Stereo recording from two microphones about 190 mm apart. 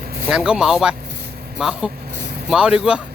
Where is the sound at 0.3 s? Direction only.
5° right (ahead or behind).